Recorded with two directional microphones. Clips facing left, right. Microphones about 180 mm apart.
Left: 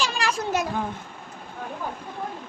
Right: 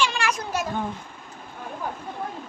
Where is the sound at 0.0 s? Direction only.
35° left (ahead or behind).